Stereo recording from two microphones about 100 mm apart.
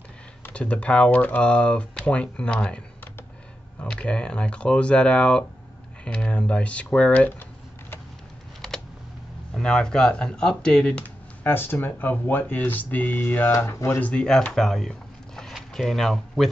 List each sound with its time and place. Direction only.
0.4 s speech: 15° left (ahead or behind)
3.8 s speech: 10° left (ahead or behind)
9.5 s speech: 10° left (ahead or behind)
14.1 s speech: 10° left (ahead or behind)